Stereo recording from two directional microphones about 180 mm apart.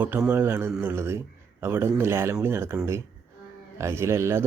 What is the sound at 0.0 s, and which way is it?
Speech, 10° right (ahead or behind).